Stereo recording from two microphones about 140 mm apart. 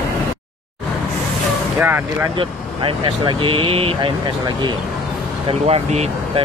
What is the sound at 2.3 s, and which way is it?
Speech, 40° right (ahead or behind).